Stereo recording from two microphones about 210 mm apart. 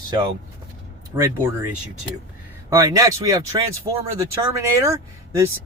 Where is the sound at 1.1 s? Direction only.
10° right (ahead or behind).